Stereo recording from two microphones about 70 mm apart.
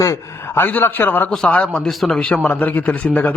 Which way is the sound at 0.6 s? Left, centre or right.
Left.